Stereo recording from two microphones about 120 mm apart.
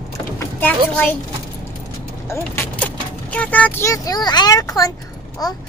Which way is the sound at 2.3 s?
15° left (ahead or behind).